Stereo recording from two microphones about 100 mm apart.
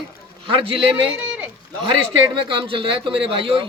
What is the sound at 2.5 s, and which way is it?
Speech, 55° right (ahead or behind).